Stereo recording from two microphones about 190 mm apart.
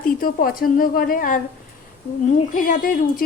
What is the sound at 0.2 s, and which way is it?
Speech, 50° left (ahead or behind).